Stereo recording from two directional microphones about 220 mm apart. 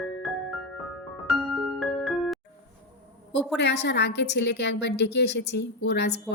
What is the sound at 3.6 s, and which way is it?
A woman's voice, 50° left (ahead or behind).